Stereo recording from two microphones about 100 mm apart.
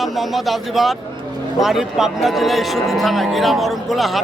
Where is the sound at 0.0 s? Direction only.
Centre (ahead or behind).